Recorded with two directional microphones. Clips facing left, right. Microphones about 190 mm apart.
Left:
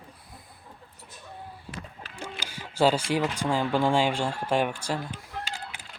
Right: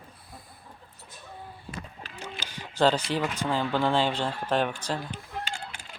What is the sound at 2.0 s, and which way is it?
Speech, 10° left (ahead or behind).